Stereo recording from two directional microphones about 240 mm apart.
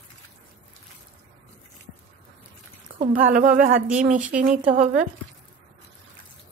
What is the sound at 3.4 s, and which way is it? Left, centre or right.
Speech, right.